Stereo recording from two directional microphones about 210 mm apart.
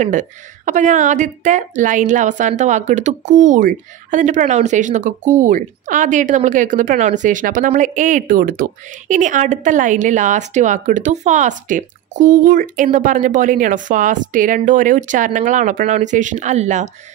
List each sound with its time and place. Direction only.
0.0 s a woman's voice: 40° right (ahead or behind)